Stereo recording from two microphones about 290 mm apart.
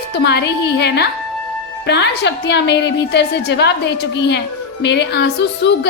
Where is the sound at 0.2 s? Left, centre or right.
Left.